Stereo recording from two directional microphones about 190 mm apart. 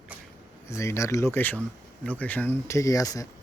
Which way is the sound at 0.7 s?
15° left (ahead or behind).